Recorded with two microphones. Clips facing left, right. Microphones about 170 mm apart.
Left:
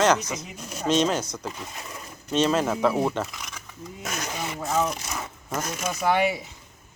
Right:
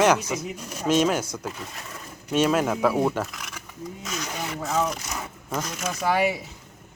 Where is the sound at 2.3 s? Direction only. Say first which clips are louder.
Right 1 dB; 10° right (ahead or behind).